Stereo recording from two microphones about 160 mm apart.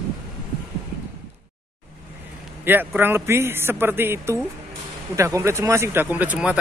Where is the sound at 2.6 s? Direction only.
10° right (ahead or behind).